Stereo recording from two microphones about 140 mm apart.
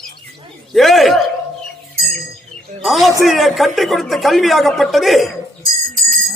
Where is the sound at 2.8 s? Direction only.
Centre (ahead or behind).